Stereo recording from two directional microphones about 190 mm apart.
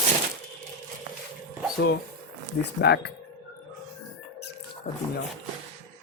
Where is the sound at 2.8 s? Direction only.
60° left (ahead or behind).